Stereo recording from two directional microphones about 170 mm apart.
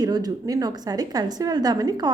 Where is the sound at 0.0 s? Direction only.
25° right (ahead or behind).